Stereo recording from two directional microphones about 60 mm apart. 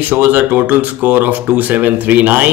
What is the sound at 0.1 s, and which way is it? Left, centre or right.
A man's voice, right.